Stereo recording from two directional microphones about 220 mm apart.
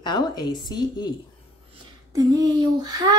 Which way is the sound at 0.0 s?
20° left (ahead or behind).